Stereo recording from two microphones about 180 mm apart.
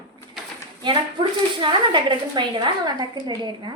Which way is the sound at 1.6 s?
25° right (ahead or behind).